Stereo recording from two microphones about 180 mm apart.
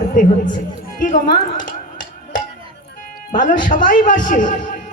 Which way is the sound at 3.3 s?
45° left (ahead or behind).